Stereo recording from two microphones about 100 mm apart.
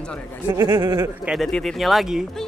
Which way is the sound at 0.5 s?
45° right (ahead or behind).